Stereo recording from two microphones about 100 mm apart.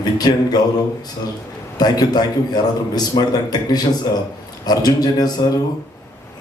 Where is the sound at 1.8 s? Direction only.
40° left (ahead or behind).